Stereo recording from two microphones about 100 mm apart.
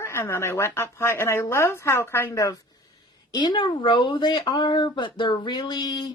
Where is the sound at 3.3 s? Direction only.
50° left (ahead or behind).